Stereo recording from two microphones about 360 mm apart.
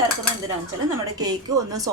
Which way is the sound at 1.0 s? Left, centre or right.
Centre.